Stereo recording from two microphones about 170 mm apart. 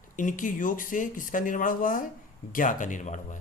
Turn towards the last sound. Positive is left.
turn(degrees=45)  # may be behind; listen again after turning